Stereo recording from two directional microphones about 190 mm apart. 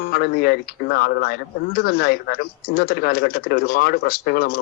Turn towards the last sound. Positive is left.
turn(degrees=55)  # may be behind; listen again after turning